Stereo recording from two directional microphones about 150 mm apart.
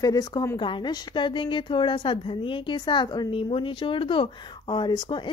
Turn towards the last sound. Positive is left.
turn(degrees=30)  # may be behind; listen again after turning